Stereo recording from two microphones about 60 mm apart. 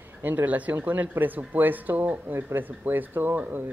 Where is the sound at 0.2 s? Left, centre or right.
Right.